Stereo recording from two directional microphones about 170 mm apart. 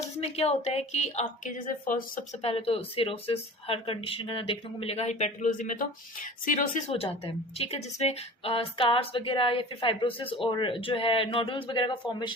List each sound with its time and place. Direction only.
0.2 s a woman's voice: 35° left (ahead or behind); by 2.2 s 55° left (ahead or behind)
2.4 s a woman's voice: 35° left (ahead or behind)
6.9 s a woman's voice: 35° left (ahead or behind)